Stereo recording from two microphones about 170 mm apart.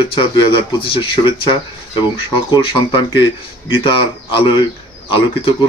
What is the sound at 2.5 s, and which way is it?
A man's voice, 30° left (ahead or behind).